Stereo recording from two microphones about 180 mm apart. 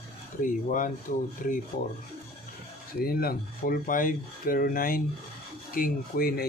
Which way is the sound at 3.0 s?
55° left (ahead or behind).